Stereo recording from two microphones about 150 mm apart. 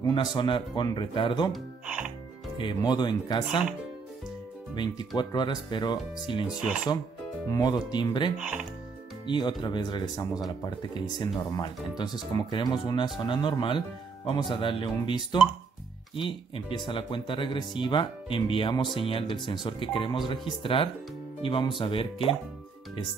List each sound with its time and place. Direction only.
0.0 s speech: 30° left (ahead or behind)
1.9 s music: 10° right (ahead or behind)
2.6 s speech: 30° left (ahead or behind)
4.7 s speech: 30° left (ahead or behind)
6.6 s speech: 5° right (ahead or behind)
7.5 s speech: 30° left (ahead or behind)
8.4 s music: 5° right (ahead or behind)
9.2 s speech: 30° left (ahead or behind)